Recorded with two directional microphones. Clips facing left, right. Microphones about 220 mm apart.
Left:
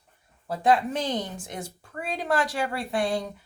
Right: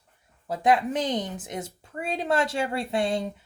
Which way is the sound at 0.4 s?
20° right (ahead or behind).